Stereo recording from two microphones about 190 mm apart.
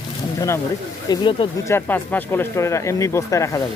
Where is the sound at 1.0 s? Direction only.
25° left (ahead or behind).